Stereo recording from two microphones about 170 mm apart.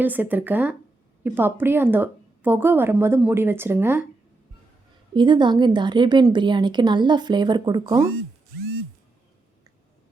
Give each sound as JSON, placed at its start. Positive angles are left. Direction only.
{"t": 0.0, "sound": "a woman's voice", "side_deg": -10}
{"t": 5.1, "sound": "a woman's voice", "side_deg": -25}